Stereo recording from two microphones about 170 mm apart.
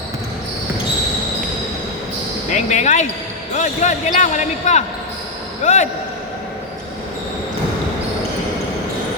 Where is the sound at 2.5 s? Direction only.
45° left (ahead or behind).